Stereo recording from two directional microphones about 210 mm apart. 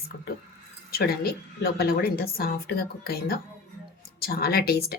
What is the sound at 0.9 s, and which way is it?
A woman's voice, 45° left (ahead or behind).